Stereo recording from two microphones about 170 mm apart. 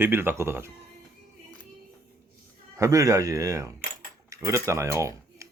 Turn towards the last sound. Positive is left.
turn(degrees=-20)  # may be behind; listen again after turning